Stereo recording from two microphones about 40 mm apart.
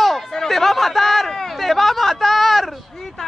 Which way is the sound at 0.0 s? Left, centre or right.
Centre.